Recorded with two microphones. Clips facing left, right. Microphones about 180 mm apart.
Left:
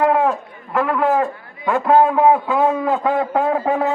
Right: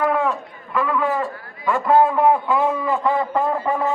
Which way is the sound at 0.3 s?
50° left (ahead or behind).